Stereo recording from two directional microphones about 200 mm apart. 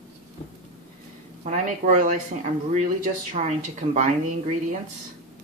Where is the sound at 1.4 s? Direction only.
40° right (ahead or behind).